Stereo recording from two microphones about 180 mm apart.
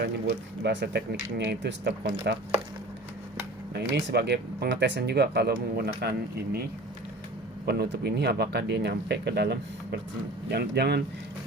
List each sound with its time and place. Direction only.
0.0 s speech: 65° right (ahead or behind)
3.9 s speech: 70° right (ahead or behind)
7.6 s speech: 65° right (ahead or behind)